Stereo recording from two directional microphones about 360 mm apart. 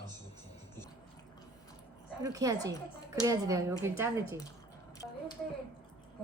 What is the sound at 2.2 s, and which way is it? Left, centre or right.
A woman's voice, centre.